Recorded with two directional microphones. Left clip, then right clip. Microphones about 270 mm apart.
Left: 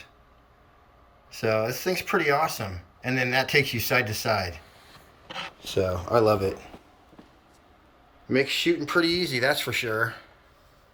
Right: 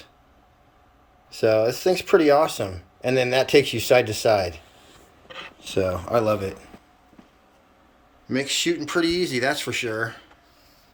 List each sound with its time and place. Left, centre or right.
1.3 s speech: right
5.5 s speech: centre
8.3 s speech: centre